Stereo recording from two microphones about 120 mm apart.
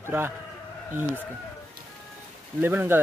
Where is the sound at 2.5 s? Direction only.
15° right (ahead or behind).